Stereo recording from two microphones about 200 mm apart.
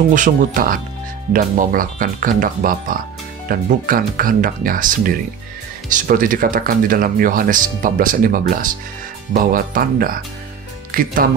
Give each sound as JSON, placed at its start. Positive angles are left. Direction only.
{"t": 0.1, "sound": "speech", "side_deg": -40}